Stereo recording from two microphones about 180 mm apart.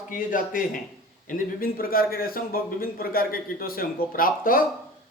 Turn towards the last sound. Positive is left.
turn(degrees=50)  # may be behind; listen again after turning